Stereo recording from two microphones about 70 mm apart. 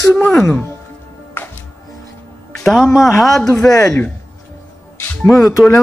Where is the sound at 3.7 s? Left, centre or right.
Left.